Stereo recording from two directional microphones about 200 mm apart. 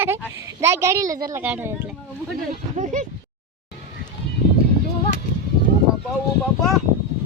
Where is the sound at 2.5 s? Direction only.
40° right (ahead or behind).